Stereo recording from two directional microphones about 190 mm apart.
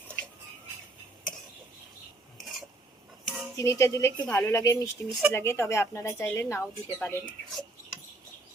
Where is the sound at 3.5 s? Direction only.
15° left (ahead or behind).